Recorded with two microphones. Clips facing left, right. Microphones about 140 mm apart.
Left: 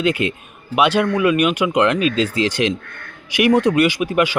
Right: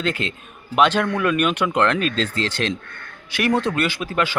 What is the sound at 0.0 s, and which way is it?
A man's voice, 10° left (ahead or behind).